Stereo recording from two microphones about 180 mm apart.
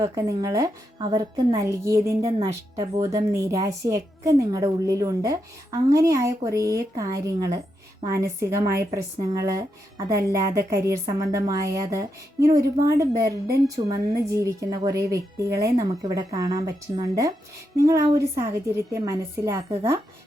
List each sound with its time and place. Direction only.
0.0 s a woman's voice: 20° right (ahead or behind)
13.8 s a woman's voice: 30° right (ahead or behind)
14.1 s a woman's voice: 20° right (ahead or behind)